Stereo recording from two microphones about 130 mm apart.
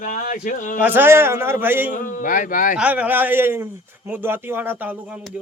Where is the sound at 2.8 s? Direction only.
10° right (ahead or behind).